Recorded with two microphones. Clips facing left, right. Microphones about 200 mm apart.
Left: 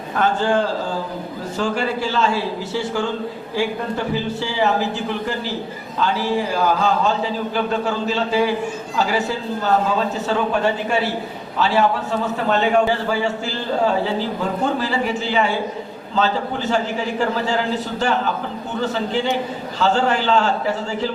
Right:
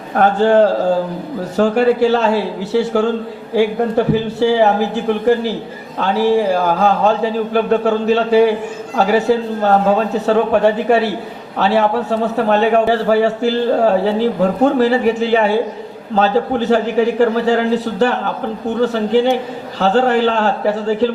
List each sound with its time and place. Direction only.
0.1 s a man's voice: 60° right (ahead or behind)